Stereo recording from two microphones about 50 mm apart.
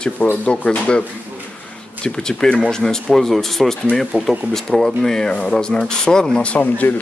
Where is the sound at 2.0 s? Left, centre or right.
Centre.